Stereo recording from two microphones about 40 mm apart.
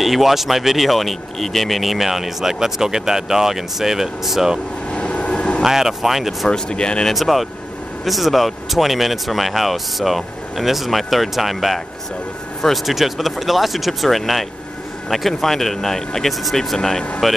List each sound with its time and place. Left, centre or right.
0.0 s speech: centre
4.9 s train: left
5.6 s speech: centre
6.5 s speech: left
7.1 s speech: centre